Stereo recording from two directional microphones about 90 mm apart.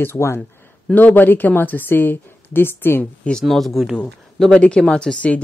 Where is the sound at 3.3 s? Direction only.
Centre (ahead or behind).